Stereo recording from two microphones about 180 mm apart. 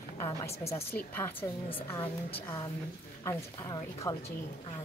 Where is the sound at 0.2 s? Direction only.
20° left (ahead or behind).